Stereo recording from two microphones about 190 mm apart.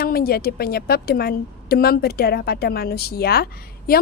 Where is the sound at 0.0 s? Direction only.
55° left (ahead or behind).